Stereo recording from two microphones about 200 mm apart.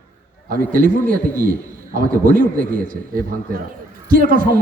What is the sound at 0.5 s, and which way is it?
A man's voice, 45° right (ahead or behind).